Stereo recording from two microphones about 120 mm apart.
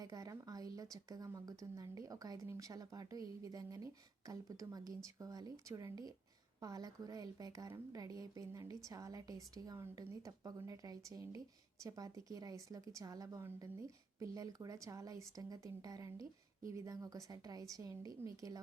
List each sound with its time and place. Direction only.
0.0 s a woman's voice: 30° right (ahead or behind)